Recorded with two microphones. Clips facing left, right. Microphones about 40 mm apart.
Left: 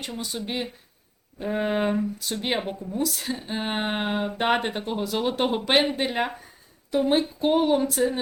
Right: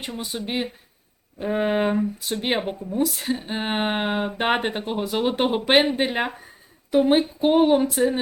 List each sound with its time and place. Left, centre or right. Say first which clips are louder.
0.0 s speech: right 2 dB; right